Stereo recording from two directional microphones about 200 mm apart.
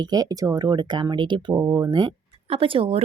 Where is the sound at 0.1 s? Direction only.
20° right (ahead or behind).